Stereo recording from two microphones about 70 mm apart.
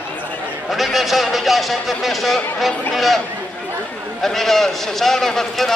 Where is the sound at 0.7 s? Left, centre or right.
Centre.